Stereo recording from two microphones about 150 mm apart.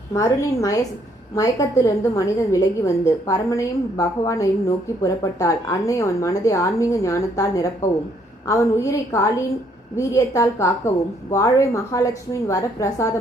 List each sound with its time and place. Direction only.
0.1 s a woman's voice: 20° left (ahead or behind)